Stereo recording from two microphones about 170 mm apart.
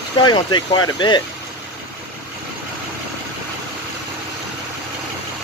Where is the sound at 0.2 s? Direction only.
25° left (ahead or behind).